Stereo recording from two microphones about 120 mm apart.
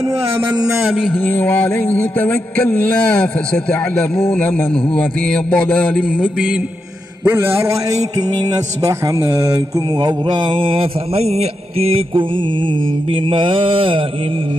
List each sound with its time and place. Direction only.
1.1 s a sound: 15° left (ahead or behind)
7.2 s speech: 20° right (ahead or behind)
8.8 s speech: 30° right (ahead or behind)
10.0 s mantra: 40° right (ahead or behind)